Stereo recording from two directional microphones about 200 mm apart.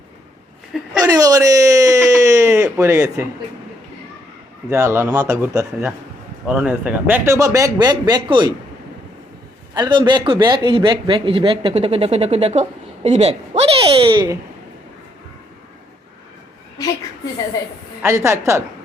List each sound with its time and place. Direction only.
1.0 s a sound: 15° right (ahead or behind)
4.7 s a man's voice: 15° right (ahead or behind)
9.7 s a man's voice: 20° right (ahead or behind)
18.0 s a man's voice: 15° right (ahead or behind)